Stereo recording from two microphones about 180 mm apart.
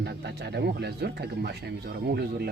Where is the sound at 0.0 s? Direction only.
65° right (ahead or behind).